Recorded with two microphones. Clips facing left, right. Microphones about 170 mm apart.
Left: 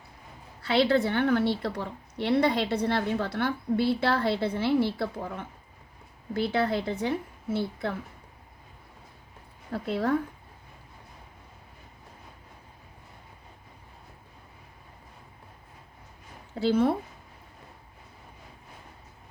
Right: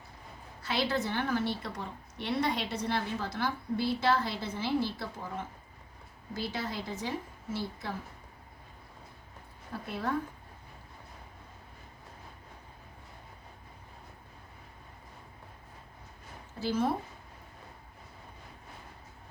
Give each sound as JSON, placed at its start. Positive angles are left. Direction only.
{"t": 0.6, "sound": "a woman's voice", "side_deg": 65}
{"t": 9.7, "sound": "a woman's voice", "side_deg": 65}
{"t": 16.6, "sound": "a woman's voice", "side_deg": 60}